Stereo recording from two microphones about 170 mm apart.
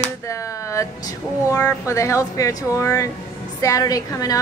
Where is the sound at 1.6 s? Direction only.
15° left (ahead or behind).